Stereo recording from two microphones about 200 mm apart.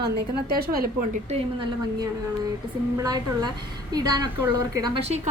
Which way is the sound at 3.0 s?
20° right (ahead or behind).